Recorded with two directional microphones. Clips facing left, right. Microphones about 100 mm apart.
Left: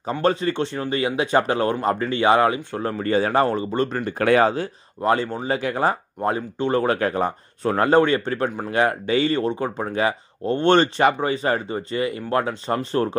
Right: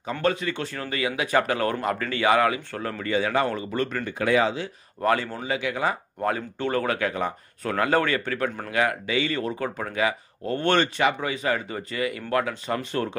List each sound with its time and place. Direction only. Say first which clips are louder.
0.2 s speech: left 5 dB; 35° left (ahead or behind)
3.0 s speech: left 4 dB; 40° left (ahead or behind)
4.2 s speech: left 5 dB; 55° left (ahead or behind)
5.0 s speech: left 3 dB; 25° left (ahead or behind)
6.2 s speech: left 3 dB; 25° left (ahead or behind)